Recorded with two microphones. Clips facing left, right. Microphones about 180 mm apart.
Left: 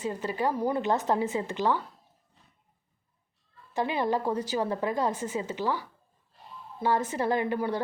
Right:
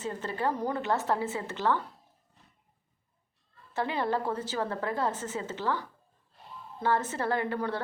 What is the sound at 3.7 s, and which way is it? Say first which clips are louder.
A woman's voice: left 2 dB; 15° left (ahead or behind).